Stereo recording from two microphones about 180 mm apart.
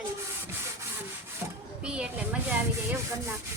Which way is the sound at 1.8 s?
5° right (ahead or behind).